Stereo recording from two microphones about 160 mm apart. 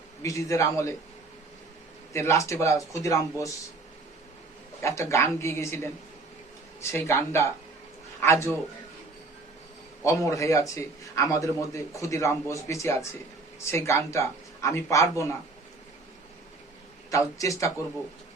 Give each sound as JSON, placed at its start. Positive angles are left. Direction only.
{"t": 0.2, "sound": "a man's voice", "side_deg": 20}
{"t": 2.1, "sound": "a man's voice", "side_deg": 20}
{"t": 4.8, "sound": "speech", "side_deg": 20}
{"t": 6.9, "sound": "speech", "side_deg": 15}
{"t": 10.0, "sound": "a man's voice", "side_deg": 20}
{"t": 17.1, "sound": "a man's voice", "side_deg": 20}